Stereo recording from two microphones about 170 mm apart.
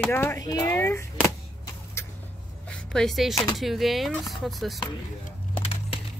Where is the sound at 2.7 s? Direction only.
5° left (ahead or behind).